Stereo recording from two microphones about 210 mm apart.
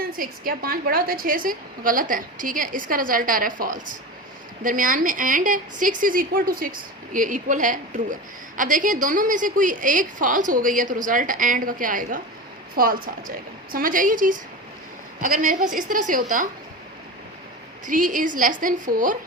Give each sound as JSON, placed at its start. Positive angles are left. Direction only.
{"t": 0.2, "sound": "a woman's voice", "side_deg": -45}
{"t": 17.8, "sound": "a woman's voice", "side_deg": -40}